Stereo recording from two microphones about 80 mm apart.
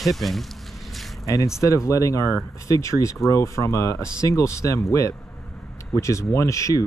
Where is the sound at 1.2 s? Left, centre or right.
Left.